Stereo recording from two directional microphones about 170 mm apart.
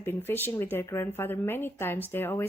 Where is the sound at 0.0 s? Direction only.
15° left (ahead or behind).